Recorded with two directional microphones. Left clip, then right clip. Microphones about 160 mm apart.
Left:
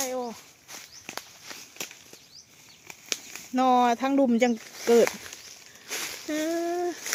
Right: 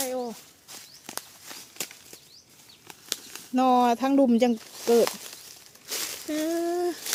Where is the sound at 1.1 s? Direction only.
15° right (ahead or behind).